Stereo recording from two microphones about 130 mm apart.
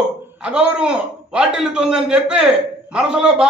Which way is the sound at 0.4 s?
5° right (ahead or behind).